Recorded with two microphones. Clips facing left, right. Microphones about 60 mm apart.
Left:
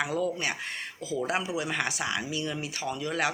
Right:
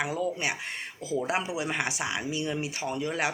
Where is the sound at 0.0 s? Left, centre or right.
Centre.